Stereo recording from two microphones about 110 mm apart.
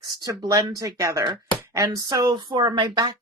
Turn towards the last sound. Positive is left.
turn(degrees=-40)  # may be behind; listen again after turning